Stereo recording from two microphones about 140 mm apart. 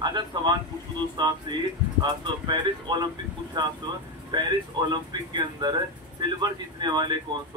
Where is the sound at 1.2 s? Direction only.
30° right (ahead or behind).